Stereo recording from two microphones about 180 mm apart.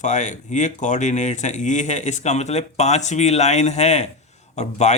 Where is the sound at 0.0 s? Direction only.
40° left (ahead or behind).